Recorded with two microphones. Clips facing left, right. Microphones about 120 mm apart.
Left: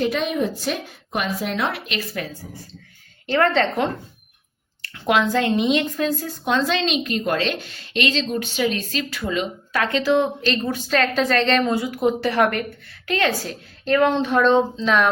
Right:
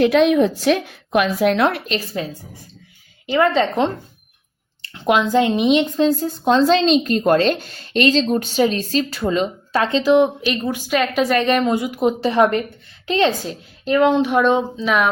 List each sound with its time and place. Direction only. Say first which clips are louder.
0.0 s a woman's voice: right 8 dB; 80° right; by 1.8 s 60° right (ahead or behind)
1.9 s a woman's voice: right 4 dB; 25° right (ahead or behind)
3.2 s a woman's voice: right 2 dB; 10° right (ahead or behind); by 9.8 s 35° right (ahead or behind)
9.8 s a woman's voice: right 4 dB; 20° right (ahead or behind)